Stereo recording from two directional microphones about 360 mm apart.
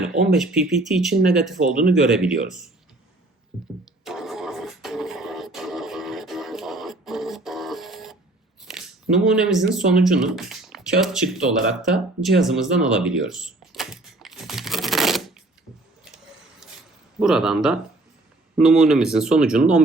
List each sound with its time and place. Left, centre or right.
0.3 s speech: centre
4.0 s a sound: centre
8.6 s speech: centre
17.2 s speech: centre